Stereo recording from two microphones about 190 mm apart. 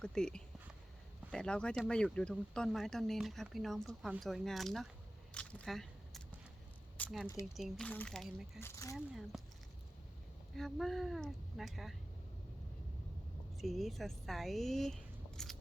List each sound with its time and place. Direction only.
0.0 s speech: 5° left (ahead or behind)
5.3 s biting: 5° left (ahead or behind)
6.9 s a sound: 5° left (ahead or behind)
7.5 s speech: centre (ahead or behind)
8.6 s speech: 15° left (ahead or behind)
9.0 s speech: centre (ahead or behind)
10.6 s speech: centre (ahead or behind)
13.6 s speech: centre (ahead or behind)